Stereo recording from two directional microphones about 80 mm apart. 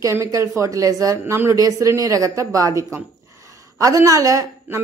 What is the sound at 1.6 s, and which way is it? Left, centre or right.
A woman's voice, right.